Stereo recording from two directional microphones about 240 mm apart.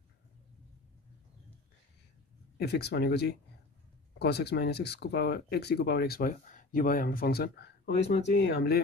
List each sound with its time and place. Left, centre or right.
2.6 s speech: left